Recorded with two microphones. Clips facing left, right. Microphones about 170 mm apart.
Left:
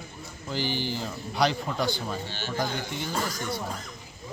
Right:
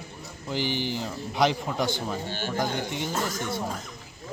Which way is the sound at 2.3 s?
50° right (ahead or behind).